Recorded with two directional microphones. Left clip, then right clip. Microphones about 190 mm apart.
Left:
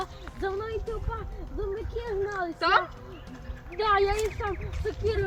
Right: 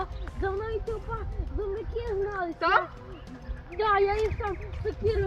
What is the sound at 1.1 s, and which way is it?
Speech, 15° left (ahead or behind).